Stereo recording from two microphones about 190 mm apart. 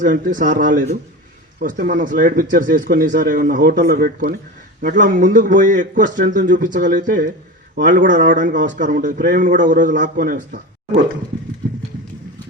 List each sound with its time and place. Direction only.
0.0 s speech: 45° right (ahead or behind)